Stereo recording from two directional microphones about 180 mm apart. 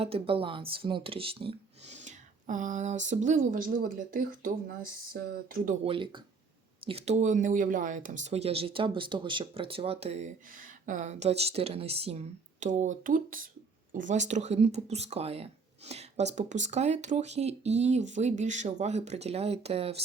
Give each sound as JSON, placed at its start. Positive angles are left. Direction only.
{"t": 0.0, "sound": "speech", "side_deg": -30}
{"t": 5.8, "sound": "speech", "side_deg": -30}